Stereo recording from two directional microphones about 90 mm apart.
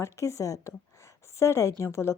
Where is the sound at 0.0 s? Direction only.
35° left (ahead or behind).